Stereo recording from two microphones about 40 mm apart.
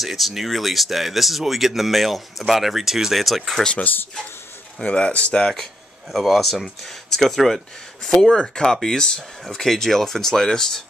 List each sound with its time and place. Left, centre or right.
0.0 s speech: centre
4.8 s speech: left
6.1 s speech: centre